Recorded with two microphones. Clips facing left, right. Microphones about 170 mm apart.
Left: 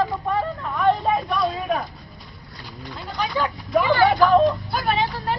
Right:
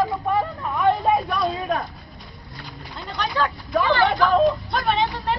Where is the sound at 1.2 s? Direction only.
Centre (ahead or behind).